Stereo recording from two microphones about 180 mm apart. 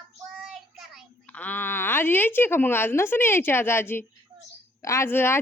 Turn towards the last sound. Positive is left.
turn(degrees=15)  # may be behind; listen again after turning